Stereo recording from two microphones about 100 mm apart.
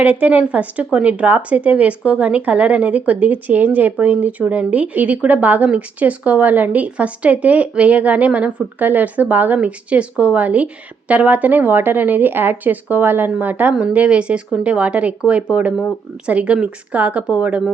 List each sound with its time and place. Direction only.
0.0 s speech: 15° right (ahead or behind)